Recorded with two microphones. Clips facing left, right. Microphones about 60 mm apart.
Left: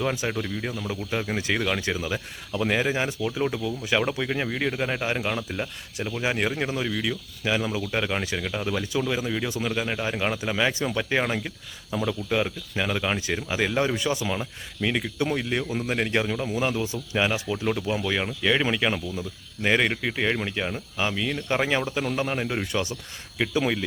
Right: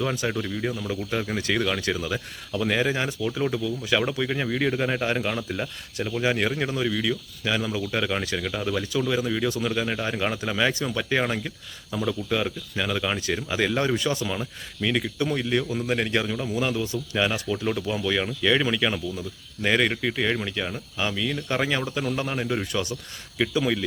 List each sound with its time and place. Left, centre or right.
0.0 s speech: centre
1.4 s speech: centre
13.9 s speech: left
15.2 s speech: left